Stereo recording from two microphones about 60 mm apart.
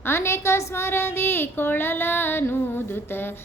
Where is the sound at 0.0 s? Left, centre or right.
Left.